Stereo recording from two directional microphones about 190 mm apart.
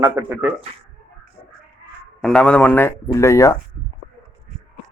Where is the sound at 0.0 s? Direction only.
10° right (ahead or behind).